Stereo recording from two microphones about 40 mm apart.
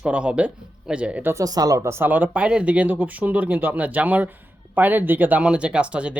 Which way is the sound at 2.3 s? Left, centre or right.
Right.